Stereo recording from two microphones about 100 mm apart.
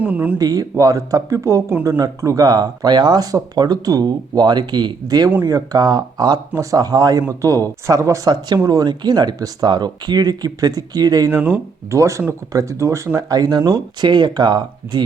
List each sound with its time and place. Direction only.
0.0 s speech: 15° right (ahead or behind)
0.3 s speech: 40° right (ahead or behind)
11.3 s speech: 20° right (ahead or behind)
11.9 s speech: 30° right (ahead or behind); by 15.0 s 50° right (ahead or behind)